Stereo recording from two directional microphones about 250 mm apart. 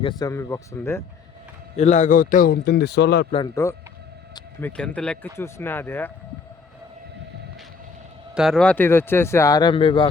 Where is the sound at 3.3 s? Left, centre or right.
Centre.